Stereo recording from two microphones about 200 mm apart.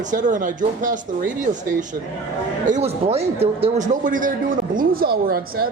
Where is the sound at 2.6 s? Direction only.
35° right (ahead or behind).